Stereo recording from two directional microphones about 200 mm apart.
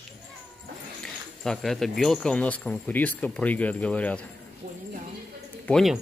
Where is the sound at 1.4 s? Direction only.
Centre (ahead or behind).